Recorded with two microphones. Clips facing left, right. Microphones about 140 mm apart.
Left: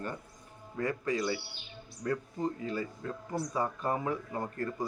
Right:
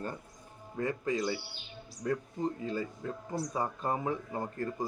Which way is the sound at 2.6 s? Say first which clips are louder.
Even; 30° right (ahead or behind).